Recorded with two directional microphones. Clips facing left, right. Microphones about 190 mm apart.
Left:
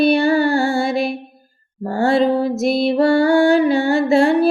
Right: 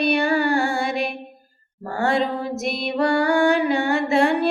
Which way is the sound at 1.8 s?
30° left (ahead or behind).